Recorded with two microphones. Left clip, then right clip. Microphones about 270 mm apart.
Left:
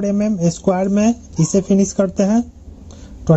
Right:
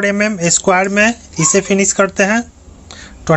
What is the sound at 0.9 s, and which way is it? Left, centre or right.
Speech, centre.